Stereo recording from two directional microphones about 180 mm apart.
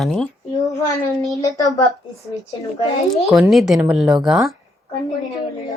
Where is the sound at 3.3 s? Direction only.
Centre (ahead or behind).